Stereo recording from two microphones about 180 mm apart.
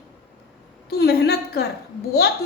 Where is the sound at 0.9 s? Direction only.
65° left (ahead or behind).